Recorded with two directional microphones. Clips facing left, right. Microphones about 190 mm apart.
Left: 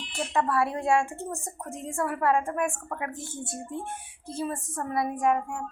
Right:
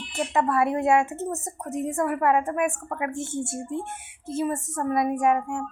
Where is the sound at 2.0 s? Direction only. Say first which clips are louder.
Right 2 dB; 15° right (ahead or behind).